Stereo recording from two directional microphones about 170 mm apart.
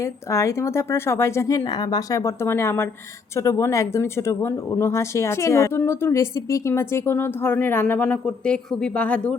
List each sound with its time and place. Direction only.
0.0 s speech: 15° left (ahead or behind)